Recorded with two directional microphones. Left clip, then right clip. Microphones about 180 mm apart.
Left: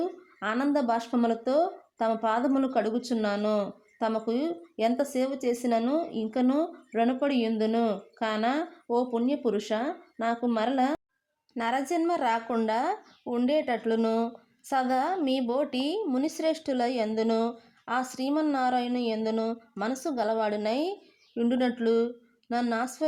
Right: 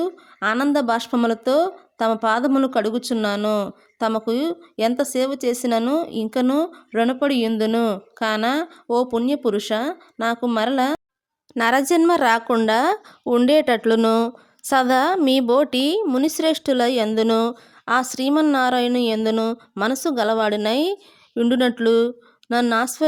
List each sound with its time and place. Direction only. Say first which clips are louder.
0.0 s speech: right 9 dB; 30° right (ahead or behind)
11.5 s speech: right 11 dB; 40° right (ahead or behind)